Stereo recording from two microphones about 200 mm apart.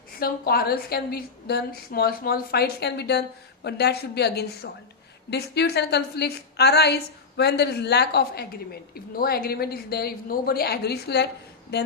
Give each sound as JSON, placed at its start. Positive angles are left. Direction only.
{"t": 0.2, "sound": "a woman's voice", "side_deg": 50}